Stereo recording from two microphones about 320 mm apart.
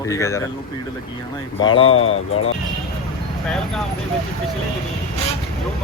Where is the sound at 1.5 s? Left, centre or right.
Left.